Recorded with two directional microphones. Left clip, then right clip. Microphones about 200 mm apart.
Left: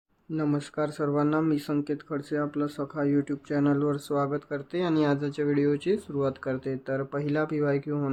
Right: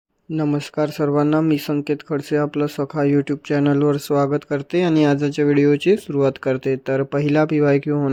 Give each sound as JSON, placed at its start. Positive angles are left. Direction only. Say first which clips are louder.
{"t": 0.3, "sound": "speech", "louder": "right 7 dB", "side_deg": -35}